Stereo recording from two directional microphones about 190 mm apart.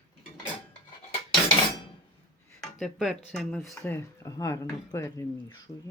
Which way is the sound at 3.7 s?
15° left (ahead or behind).